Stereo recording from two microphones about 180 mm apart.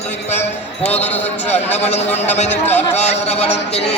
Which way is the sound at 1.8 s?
35° left (ahead or behind).